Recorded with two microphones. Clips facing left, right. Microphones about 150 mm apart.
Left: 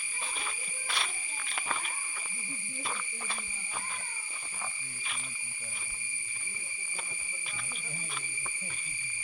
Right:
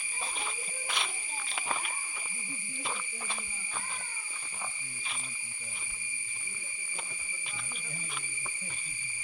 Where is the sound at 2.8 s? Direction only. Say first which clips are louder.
Even; 20° right (ahead or behind).